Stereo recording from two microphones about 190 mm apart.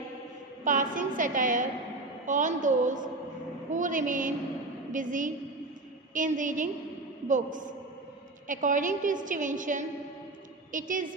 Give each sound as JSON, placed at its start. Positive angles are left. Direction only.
{"t": 0.7, "sound": "a woman's voice", "side_deg": -45}